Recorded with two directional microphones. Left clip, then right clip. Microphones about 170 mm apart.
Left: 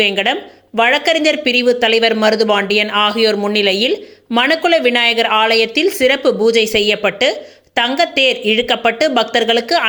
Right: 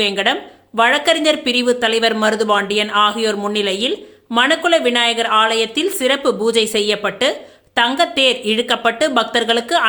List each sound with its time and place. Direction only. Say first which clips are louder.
0.0 s speech: left 2 dB; 10° left (ahead or behind)